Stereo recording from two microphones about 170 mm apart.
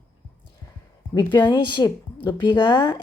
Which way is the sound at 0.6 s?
20° left (ahead or behind).